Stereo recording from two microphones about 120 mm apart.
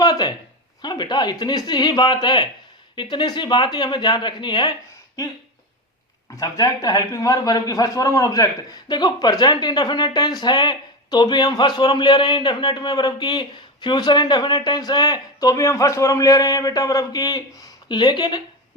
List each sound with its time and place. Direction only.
0.0 s speech: 35° left (ahead or behind)
6.3 s speech: 30° left (ahead or behind)